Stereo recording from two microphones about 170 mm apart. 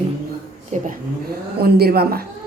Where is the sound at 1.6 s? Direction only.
70° right (ahead or behind).